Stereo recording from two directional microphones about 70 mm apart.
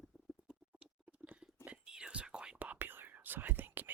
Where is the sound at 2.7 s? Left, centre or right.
Right.